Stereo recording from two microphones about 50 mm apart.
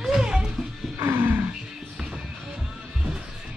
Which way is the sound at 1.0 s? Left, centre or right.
Right.